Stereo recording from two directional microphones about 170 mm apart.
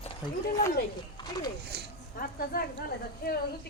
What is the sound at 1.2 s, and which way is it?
Speech, 25° left (ahead or behind).